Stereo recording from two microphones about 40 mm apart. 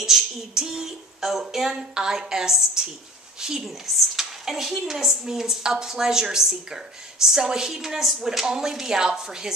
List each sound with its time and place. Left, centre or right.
0.0 s a sound: centre
2.0 s a woman's voice: centre
3.6 s a woman's voice: centre